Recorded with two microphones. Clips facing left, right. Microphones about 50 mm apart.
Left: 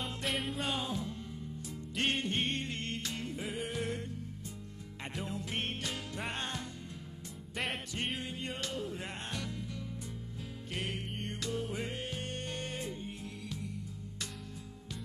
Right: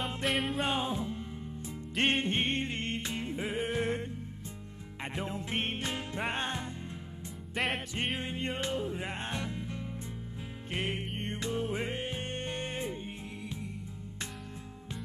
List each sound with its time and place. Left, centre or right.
0.0 s music: centre
0.6 s music: right
7.5 s music: centre
8.2 s music: right